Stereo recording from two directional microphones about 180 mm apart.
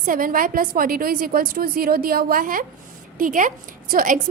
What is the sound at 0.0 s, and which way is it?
A woman's voice, 50° right (ahead or behind).